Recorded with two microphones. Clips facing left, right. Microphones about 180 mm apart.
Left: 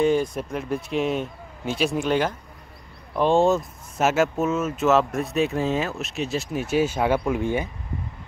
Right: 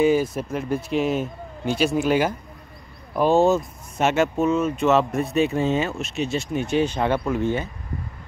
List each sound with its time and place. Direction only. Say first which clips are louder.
0.0 s speech: right 2 dB; 5° right (ahead or behind); by 7.7 s 15° left (ahead or behind)